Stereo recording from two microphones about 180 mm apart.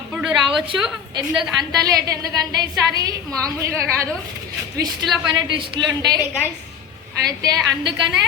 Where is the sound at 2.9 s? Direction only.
20° right (ahead or behind).